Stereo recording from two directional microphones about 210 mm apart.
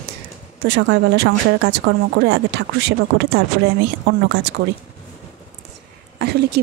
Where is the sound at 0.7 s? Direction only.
55° right (ahead or behind).